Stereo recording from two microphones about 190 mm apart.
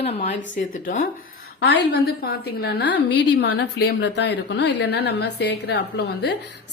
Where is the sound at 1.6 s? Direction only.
65° left (ahead or behind).